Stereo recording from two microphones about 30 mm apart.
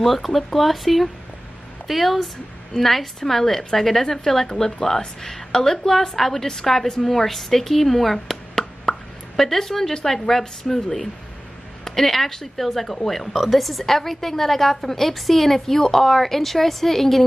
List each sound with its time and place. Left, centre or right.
0.0 s a woman's voice: centre
8.9 s plop: left
9.4 s a woman's voice: centre